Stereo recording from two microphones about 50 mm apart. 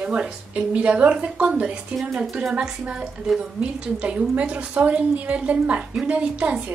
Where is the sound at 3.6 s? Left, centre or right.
Right.